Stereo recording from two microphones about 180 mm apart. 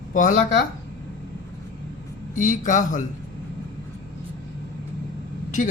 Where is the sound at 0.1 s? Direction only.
45° left (ahead or behind).